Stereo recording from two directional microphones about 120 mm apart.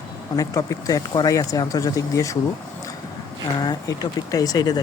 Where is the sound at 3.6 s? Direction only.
35° left (ahead or behind).